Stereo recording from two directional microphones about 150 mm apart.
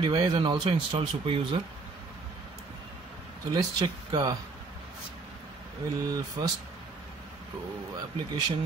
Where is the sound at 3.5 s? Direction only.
30° right (ahead or behind).